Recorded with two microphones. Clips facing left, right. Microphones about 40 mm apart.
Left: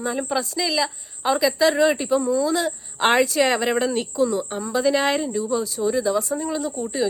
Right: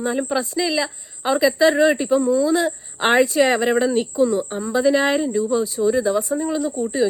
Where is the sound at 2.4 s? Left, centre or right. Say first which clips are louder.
Right 3 dB; right.